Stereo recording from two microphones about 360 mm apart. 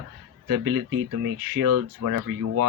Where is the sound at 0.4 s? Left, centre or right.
Right.